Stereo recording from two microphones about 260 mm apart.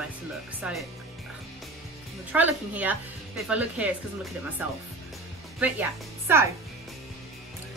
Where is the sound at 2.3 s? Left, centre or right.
Centre.